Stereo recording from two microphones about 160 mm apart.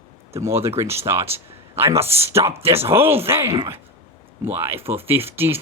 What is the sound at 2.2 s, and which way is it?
Speech, 15° right (ahead or behind).